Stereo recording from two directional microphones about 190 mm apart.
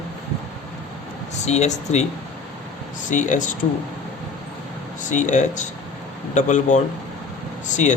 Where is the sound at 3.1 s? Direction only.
40° left (ahead or behind).